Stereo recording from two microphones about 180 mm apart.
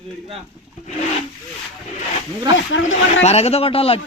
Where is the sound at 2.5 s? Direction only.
90° left.